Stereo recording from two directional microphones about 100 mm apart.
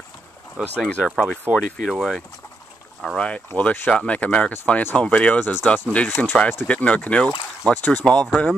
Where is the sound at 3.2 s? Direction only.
10° left (ahead or behind).